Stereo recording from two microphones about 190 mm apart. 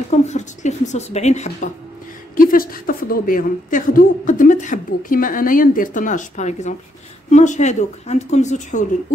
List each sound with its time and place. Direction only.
0.1 s speech: 40° left (ahead or behind)
2.3 s a woman's voice: 50° left (ahead or behind)